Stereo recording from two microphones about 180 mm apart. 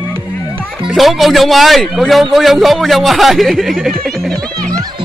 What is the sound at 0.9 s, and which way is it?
Speech, centre (ahead or behind).